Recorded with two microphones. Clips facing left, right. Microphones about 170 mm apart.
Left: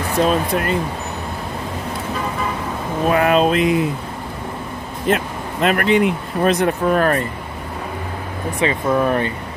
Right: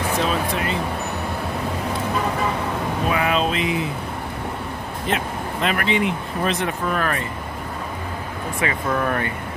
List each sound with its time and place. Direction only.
0.5 s speech: 55° left (ahead or behind)
3.1 s speech: 50° left (ahead or behind)
5.0 s speech: 50° left (ahead or behind)
8.5 s speech: 25° left (ahead or behind)